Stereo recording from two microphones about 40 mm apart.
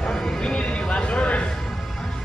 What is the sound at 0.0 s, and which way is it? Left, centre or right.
Horse, centre.